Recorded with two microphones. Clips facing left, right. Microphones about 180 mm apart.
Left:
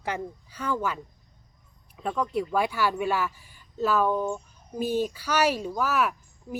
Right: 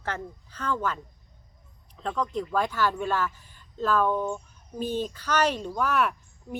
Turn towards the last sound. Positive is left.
turn(degrees=5)  # may be behind; listen again after turning